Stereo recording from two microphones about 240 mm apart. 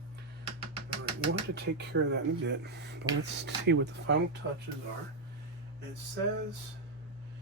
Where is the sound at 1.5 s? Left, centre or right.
Right.